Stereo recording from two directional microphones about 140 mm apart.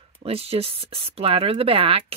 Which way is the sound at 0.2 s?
45° right (ahead or behind).